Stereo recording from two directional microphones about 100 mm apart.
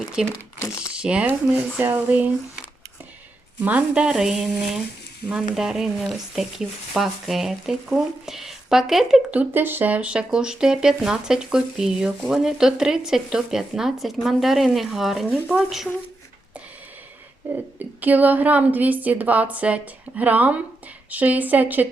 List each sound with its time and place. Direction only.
0.2 s speech: 5° right (ahead or behind)
0.6 s crumpling: 30° left (ahead or behind)
0.9 s speech: 10° right (ahead or behind)
3.6 s speech: 15° right (ahead or behind)
9.3 s speech: 15° right (ahead or behind)
17.7 s speech: 15° right (ahead or behind)